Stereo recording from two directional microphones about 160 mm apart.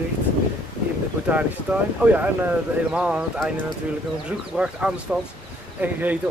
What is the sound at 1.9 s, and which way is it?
Speech, 10° right (ahead or behind).